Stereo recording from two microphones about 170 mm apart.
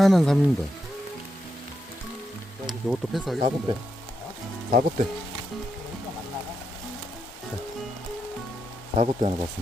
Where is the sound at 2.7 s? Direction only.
Centre (ahead or behind).